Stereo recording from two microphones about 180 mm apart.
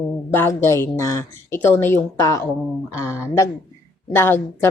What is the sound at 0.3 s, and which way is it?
Speech, 15° left (ahead or behind).